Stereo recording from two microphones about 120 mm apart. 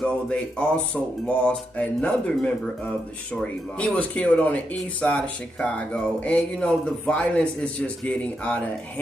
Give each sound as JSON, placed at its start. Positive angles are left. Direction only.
{"t": 0.0, "sound": "speech", "side_deg": 5}
{"t": 3.3, "sound": "speech", "side_deg": 10}